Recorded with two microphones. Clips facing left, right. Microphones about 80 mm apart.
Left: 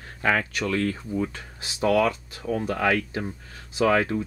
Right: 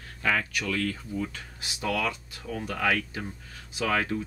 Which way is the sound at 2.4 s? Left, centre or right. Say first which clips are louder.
Left 7 dB; left.